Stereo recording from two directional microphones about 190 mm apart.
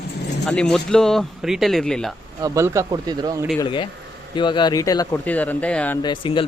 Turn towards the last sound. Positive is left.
turn(degrees=25)  # may be behind; listen again after turning